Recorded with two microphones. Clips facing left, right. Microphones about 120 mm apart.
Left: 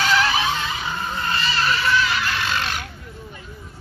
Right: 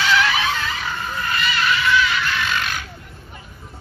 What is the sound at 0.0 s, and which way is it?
Vehicle, 35° left (ahead or behind).